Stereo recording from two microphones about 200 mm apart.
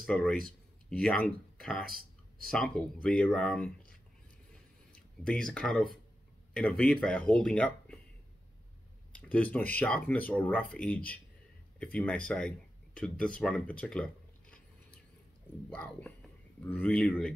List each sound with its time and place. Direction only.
0.0 s speech: 5° left (ahead or behind)
1.9 s a sound: 45° right (ahead or behind)
2.5 s speech: 5° left (ahead or behind)
4.9 s speech: 5° left (ahead or behind)
9.1 s speech: 5° left (ahead or behind)
15.7 s speech: 5° left (ahead or behind)